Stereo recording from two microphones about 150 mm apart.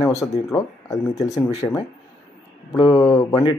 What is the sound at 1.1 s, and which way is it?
Speech, 50° left (ahead or behind).